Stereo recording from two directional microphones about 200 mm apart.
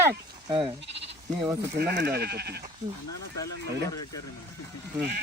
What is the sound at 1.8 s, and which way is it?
Speech, 55° right (ahead or behind).